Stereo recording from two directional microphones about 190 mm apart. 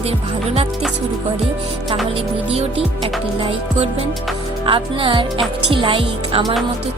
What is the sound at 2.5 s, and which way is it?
Speech, 30° right (ahead or behind).